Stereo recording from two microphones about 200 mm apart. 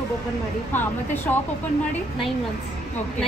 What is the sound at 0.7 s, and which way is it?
Speech, 10° left (ahead or behind).